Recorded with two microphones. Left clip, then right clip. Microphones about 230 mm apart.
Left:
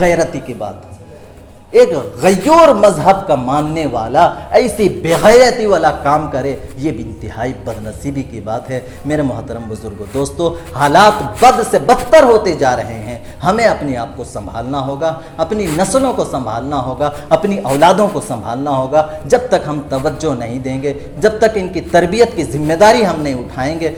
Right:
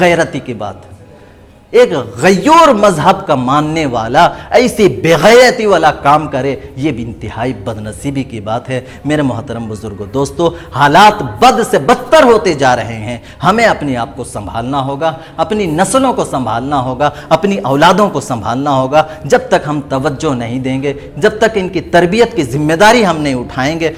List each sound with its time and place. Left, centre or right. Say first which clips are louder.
0.0 s a man's voice: right 2 dB; right
1.7 s a man's voice: right 1 dB; right
2.5 s a man's voice: right 1 dB; right
2.7 s a man's voice: even; right